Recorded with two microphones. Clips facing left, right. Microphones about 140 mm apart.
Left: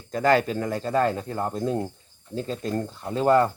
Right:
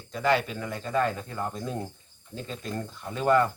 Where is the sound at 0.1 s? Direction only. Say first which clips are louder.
Left 5 dB; 40° left (ahead or behind).